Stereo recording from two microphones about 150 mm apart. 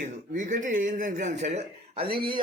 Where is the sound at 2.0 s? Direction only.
90° right.